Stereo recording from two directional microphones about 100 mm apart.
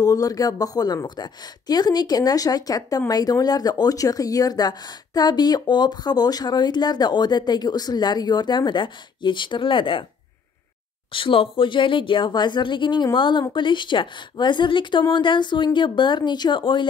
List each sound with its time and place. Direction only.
0.0 s speech: 35° left (ahead or behind); by 10.0 s 55° left (ahead or behind)
11.1 s speech: 60° left (ahead or behind)